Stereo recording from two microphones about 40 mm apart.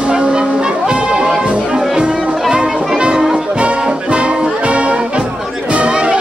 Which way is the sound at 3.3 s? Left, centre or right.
Right.